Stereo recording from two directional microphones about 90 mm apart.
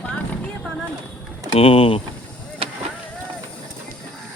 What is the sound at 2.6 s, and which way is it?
Vehicle, 90° right.